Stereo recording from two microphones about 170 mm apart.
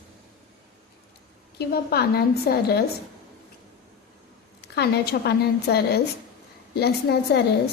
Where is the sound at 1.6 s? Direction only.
65° left (ahead or behind).